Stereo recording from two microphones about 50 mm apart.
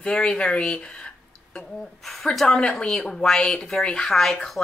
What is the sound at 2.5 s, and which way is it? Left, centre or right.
Speech, centre.